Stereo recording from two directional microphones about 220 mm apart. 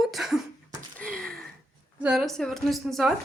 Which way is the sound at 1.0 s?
5° left (ahead or behind).